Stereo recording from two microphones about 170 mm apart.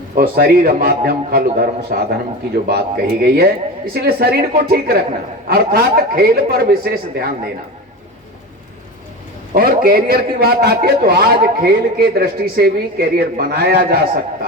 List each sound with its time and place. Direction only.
0.2 s a man's voice: 60° right (ahead or behind)
9.5 s a man's voice: 60° right (ahead or behind)